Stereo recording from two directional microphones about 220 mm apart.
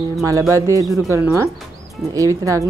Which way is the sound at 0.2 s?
15° right (ahead or behind).